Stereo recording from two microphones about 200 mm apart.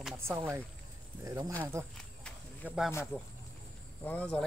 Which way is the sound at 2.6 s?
5° right (ahead or behind).